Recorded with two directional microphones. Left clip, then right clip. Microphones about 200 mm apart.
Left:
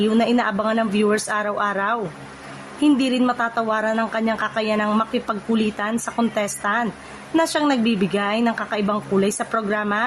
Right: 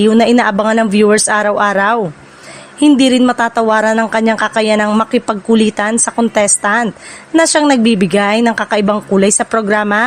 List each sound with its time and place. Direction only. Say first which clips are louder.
0.0 s speech: right 10 dB; 45° right (ahead or behind)